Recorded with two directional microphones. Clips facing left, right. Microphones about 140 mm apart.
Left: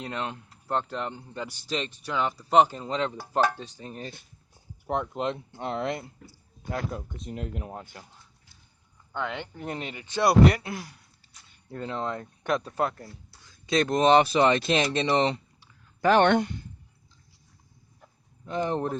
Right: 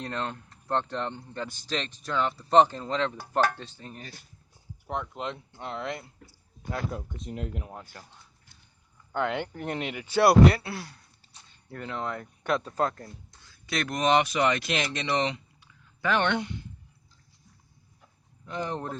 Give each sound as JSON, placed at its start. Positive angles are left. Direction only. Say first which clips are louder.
{"t": 0.0, "sound": "speech", "louder": "even", "side_deg": 10}
{"t": 4.9, "sound": "speech", "louder": "left 5 dB", "side_deg": 35}
{"t": 9.1, "sound": "speech", "louder": "right 4 dB", "side_deg": -10}
{"t": 9.6, "sound": "speech", "louder": "right 2 dB", "side_deg": 0}
{"t": 10.5, "sound": "speech", "louder": "even", "side_deg": 15}
{"t": 11.7, "sound": "speech", "louder": "left 2 dB", "side_deg": 25}
{"t": 18.4, "sound": "speech", "louder": "left 5 dB", "side_deg": 25}